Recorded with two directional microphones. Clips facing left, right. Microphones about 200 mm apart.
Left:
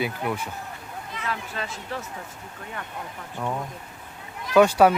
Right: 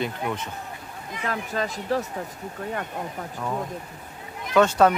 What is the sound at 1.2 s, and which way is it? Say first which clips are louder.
Speech: right 5 dB; 45° right (ahead or behind).